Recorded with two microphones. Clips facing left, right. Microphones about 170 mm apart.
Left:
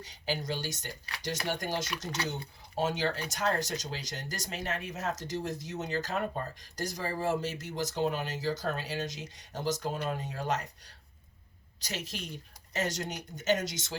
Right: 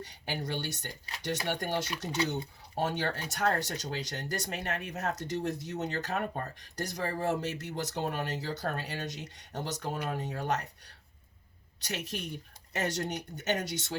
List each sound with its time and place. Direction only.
0.0 s speech: 60° right (ahead or behind)